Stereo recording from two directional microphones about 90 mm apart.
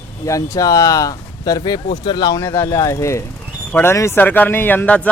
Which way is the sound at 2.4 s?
30° left (ahead or behind).